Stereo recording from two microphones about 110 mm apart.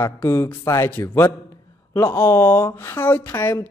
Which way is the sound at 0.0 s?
20° left (ahead or behind).